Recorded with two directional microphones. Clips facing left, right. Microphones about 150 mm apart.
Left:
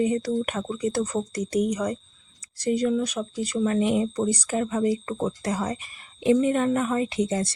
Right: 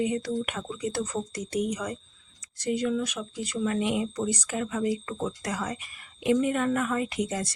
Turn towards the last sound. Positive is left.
turn(degrees=30)  # may be behind; listen again after turning